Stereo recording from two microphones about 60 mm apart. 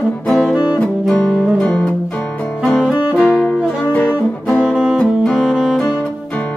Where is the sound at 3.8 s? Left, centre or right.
Left.